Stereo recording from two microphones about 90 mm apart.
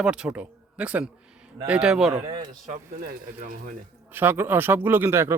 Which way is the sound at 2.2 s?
55° right (ahead or behind).